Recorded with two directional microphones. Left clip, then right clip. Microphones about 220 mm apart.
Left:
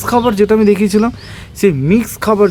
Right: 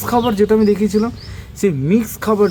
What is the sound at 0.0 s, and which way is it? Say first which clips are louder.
Speech: left 3 dB; 25° left (ahead or behind).